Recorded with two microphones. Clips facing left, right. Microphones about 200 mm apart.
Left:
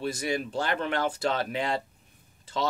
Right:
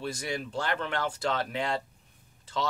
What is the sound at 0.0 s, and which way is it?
Speech, 10° left (ahead or behind).